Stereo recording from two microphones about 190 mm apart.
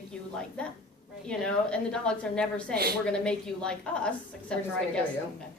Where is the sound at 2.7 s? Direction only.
55° right (ahead or behind).